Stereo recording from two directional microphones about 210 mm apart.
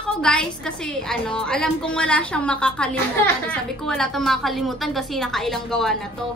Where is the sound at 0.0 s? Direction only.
5° left (ahead or behind).